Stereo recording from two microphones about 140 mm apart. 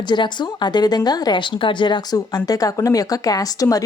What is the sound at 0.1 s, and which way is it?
Speech, 30° left (ahead or behind).